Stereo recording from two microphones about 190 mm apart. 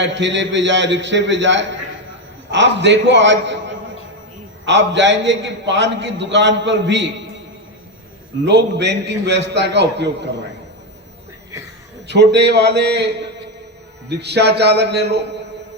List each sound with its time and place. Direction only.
0.0 s a man's voice: 70° right (ahead or behind)
8.4 s a man's voice: 65° right (ahead or behind)
12.0 s a man's voice: 65° right (ahead or behind)
14.1 s a man's voice: 60° right (ahead or behind)